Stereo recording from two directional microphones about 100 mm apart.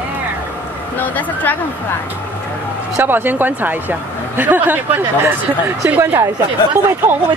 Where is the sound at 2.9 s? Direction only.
20° right (ahead or behind).